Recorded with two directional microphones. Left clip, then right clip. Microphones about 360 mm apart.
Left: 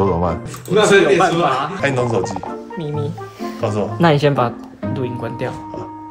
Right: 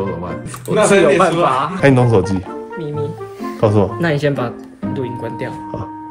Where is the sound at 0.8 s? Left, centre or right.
Centre.